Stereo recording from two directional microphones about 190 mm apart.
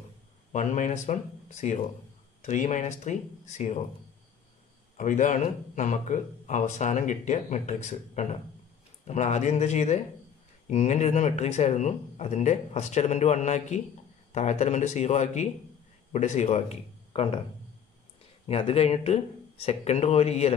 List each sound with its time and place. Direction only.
0.5 s speech: 40° left (ahead or behind)
4.9 s speech: 40° left (ahead or behind)
18.5 s speech: 30° left (ahead or behind)